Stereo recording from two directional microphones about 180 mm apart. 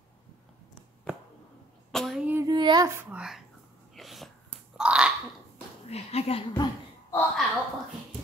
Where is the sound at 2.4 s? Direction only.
25° right (ahead or behind); by 3.4 s 5° right (ahead or behind).